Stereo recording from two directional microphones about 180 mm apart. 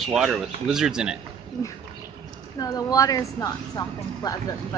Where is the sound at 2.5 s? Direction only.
20° left (ahead or behind).